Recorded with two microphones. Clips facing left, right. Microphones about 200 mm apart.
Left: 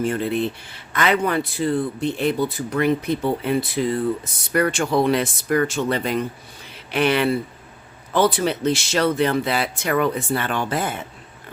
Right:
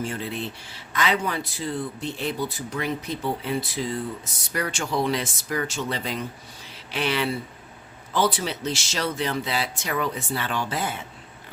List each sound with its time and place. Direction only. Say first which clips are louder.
0.0 s speech: left 8 dB; 55° left (ahead or behind)